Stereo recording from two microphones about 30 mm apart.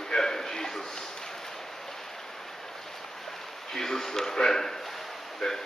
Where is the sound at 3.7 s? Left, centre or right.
Centre.